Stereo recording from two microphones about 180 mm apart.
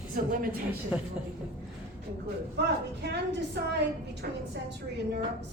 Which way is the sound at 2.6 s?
70° right (ahead or behind).